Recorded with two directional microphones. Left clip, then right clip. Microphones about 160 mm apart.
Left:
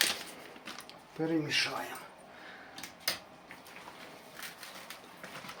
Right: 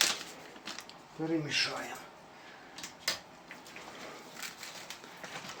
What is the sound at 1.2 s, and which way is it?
Speech, 75° left (ahead or behind).